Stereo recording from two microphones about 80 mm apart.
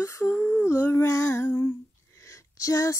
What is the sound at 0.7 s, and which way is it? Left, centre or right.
Female singing, left.